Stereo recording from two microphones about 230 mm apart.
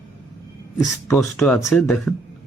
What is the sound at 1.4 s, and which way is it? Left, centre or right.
Speech, centre.